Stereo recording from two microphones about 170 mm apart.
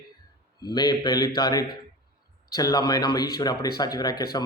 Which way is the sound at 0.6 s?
25° left (ahead or behind).